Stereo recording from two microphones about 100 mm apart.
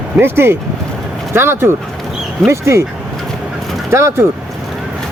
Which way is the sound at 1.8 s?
Centre (ahead or behind).